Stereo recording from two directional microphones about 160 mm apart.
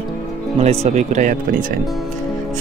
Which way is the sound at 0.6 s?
40° right (ahead or behind).